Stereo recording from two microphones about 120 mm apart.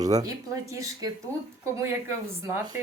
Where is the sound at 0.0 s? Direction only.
30° right (ahead or behind).